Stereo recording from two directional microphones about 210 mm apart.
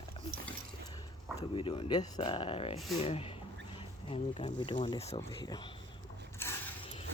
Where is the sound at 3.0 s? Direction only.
30° left (ahead or behind).